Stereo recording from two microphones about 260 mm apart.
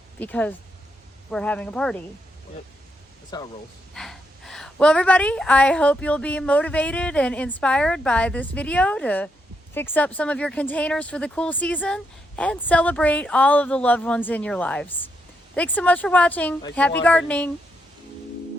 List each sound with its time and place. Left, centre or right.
0.2 s a woman's voice: centre
3.3 s speech: centre
3.9 s a woman's voice: centre